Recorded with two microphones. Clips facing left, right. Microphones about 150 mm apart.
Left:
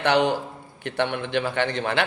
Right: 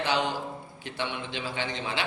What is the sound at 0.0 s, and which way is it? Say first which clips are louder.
Speech: left 7 dB; 65° left (ahead or behind).